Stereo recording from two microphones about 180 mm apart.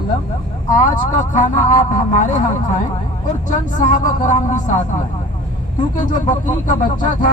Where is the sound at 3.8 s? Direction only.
45° left (ahead or behind).